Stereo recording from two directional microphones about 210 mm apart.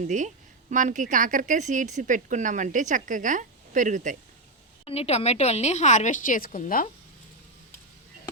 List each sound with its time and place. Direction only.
0.0 s speech: 35° right (ahead or behind)
4.9 s a woman's voice: 30° left (ahead or behind)